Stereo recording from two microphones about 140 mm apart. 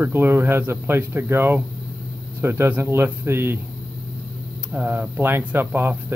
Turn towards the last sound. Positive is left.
turn(degrees=-15)  # may be behind; listen again after turning